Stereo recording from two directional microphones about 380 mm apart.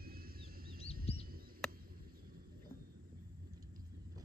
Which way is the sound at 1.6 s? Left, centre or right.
Centre.